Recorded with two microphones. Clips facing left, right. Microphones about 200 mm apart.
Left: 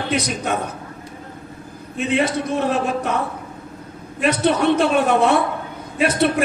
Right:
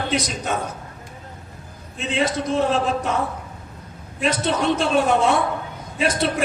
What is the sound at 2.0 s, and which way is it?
A man's voice, 60° left (ahead or behind).